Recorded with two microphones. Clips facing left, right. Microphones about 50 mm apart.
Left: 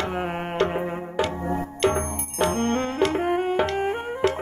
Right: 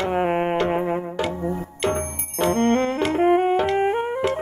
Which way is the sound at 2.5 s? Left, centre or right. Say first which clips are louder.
Right 5 dB; right.